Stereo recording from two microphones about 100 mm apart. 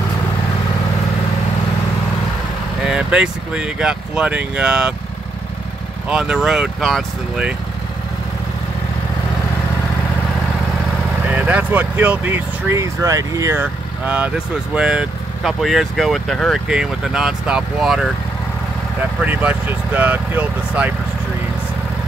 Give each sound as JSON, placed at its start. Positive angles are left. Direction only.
{"t": 2.9, "sound": "speech", "side_deg": -10}
{"t": 6.0, "sound": "speech", "side_deg": -10}
{"t": 11.2, "sound": "speech", "side_deg": -15}
{"t": 12.7, "sound": "speech", "side_deg": -30}
{"t": 13.6, "sound": "speech", "side_deg": -15}
{"t": 15.4, "sound": "speech", "side_deg": 0}
{"t": 16.6, "sound": "speech", "side_deg": -5}
{"t": 19.2, "sound": "speech", "side_deg": -20}